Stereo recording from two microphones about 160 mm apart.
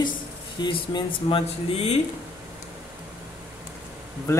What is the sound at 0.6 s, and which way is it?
Speech, 30° left (ahead or behind).